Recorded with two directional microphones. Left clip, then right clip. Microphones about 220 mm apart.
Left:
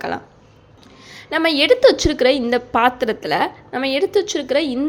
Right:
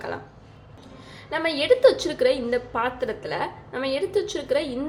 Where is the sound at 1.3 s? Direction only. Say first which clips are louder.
Left 6 dB; 45° left (ahead or behind).